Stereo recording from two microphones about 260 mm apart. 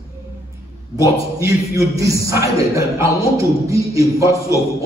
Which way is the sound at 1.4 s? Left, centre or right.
Centre.